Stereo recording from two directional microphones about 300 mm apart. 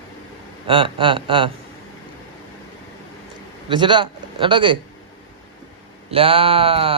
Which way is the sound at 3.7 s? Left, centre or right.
Centre.